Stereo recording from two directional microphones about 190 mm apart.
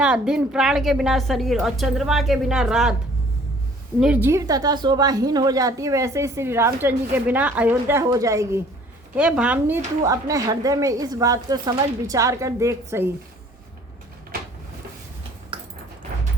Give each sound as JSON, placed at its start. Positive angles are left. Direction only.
{"t": 0.0, "sound": "a woman's voice", "side_deg": -5}
{"t": 4.0, "sound": "a woman's voice", "side_deg": -10}
{"t": 15.5, "sound": "a sound", "side_deg": -30}